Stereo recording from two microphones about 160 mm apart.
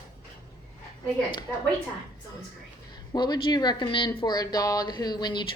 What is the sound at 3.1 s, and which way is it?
Speech, 25° left (ahead or behind).